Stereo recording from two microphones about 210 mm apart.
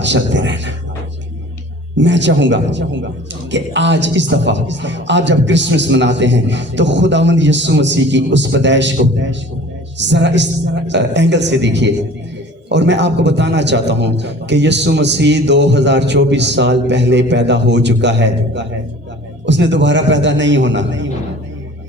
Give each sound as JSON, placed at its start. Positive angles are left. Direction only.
{"t": 0.0, "sound": "a man's voice", "side_deg": -60}
{"t": 2.0, "sound": "a man's voice", "side_deg": -60}